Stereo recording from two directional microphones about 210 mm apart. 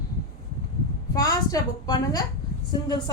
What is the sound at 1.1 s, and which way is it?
A woman's voice, 15° left (ahead or behind).